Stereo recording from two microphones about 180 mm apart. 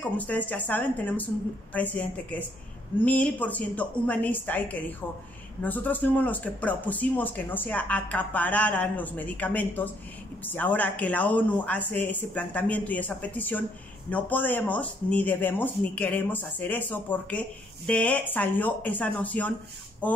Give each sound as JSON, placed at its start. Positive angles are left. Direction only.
{"t": 0.2, "sound": "speech", "side_deg": 10}